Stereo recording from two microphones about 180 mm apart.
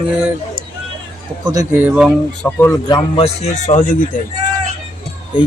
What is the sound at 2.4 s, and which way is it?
Speech, 10° left (ahead or behind).